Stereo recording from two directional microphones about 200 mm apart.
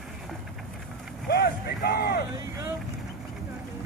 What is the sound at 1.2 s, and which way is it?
Vehicle, 55° left (ahead or behind).